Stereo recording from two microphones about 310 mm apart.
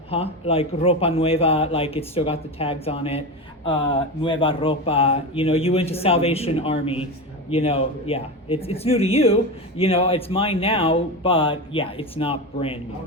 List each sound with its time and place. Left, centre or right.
0.1 s speech: centre